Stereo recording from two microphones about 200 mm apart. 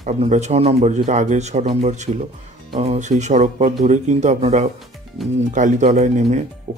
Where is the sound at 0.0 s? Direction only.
35° right (ahead or behind).